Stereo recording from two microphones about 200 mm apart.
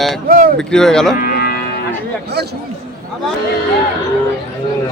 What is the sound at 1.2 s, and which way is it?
Cattle, 50° left (ahead or behind).